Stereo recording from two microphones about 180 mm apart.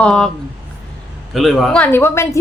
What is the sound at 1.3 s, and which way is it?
A woman's voice, centre (ahead or behind).